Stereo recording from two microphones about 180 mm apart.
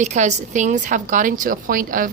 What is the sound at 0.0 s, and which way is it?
Speech, 40° right (ahead or behind).